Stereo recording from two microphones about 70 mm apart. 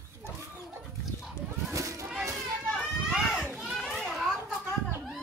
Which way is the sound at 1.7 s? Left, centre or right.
Right.